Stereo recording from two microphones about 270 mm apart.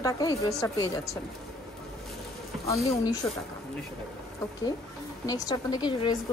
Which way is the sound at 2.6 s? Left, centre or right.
Centre.